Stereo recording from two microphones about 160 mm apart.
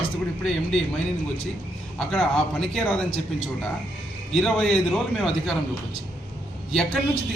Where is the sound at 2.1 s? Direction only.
5° left (ahead or behind).